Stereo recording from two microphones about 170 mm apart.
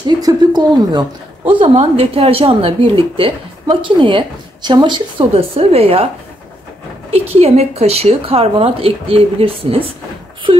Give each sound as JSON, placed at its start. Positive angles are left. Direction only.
{"t": 0.2, "sound": "a woman's voice", "side_deg": -25}
{"t": 7.1, "sound": "speech", "side_deg": -35}